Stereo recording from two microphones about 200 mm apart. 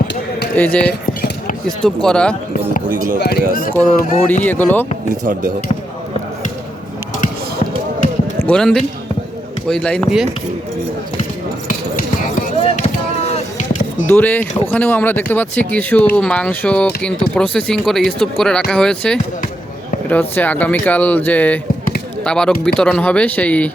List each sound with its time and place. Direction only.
0.5 s speech: 5° left (ahead or behind)
2.9 s speech: 45° right (ahead or behind)
3.2 s speech: 50° left (ahead or behind)
4.4 s speech: 10° left (ahead or behind)
5.2 s speech: 40° right (ahead or behind)
8.4 s speech: 5° left (ahead or behind)
13.2 s music: 35° left (ahead or behind)
14.1 s speech: 10° left (ahead or behind)